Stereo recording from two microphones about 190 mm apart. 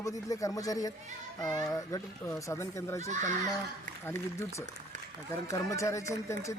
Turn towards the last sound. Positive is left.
turn(degrees=15)  # may be behind; listen again after turning